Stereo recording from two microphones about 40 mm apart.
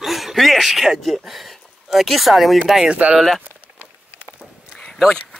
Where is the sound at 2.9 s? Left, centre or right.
Right.